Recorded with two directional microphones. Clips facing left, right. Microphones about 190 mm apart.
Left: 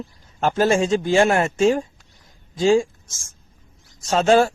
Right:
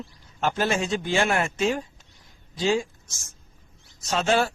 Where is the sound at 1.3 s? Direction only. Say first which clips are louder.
Left 7 dB; 45° left (ahead or behind).